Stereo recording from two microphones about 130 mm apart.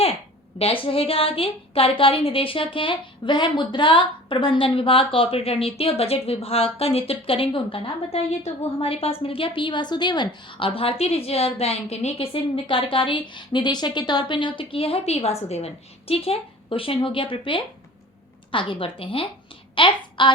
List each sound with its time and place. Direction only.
0.6 s a woman's voice: 45° left (ahead or behind)